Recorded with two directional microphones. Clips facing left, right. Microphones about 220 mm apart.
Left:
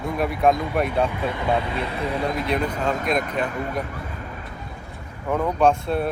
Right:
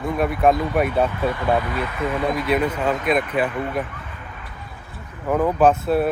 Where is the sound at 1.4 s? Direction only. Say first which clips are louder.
Even; 25° left (ahead or behind).